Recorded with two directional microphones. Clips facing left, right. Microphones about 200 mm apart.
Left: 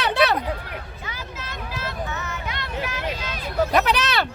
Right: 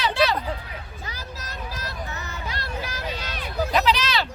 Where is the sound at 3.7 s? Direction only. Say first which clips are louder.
Right 1 dB; 55° left (ahead or behind).